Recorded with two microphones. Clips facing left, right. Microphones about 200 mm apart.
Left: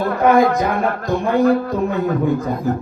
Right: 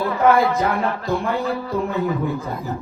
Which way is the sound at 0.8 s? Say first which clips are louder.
Left 3 dB; 55° left (ahead or behind).